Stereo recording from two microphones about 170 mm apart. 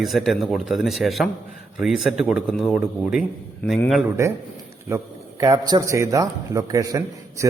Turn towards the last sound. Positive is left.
turn(degrees=-20)  # may be behind; listen again after turning